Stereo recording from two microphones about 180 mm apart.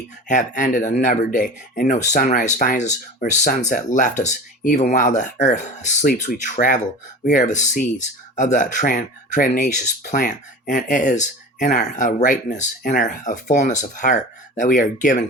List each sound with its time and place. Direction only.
0.3 s speech: 45° left (ahead or behind)